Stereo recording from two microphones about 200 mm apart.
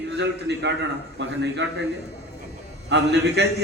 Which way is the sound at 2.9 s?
60° right (ahead or behind).